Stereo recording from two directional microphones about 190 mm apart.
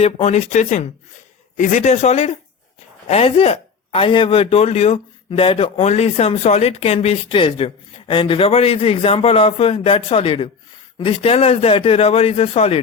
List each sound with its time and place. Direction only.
0.0 s a man's voice: 35° left (ahead or behind)